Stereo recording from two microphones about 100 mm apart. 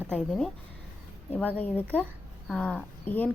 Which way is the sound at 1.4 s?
15° left (ahead or behind).